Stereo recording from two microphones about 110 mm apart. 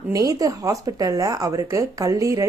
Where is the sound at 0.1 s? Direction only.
30° right (ahead or behind).